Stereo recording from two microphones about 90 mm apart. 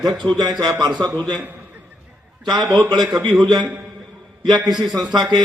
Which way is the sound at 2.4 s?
55° right (ahead or behind).